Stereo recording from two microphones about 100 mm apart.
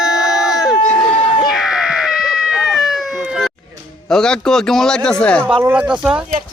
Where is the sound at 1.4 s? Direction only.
Centre (ahead or behind).